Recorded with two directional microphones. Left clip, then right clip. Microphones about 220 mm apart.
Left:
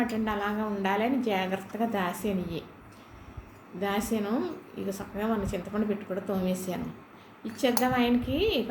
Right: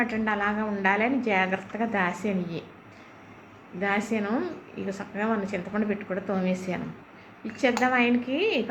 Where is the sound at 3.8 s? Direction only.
15° left (ahead or behind).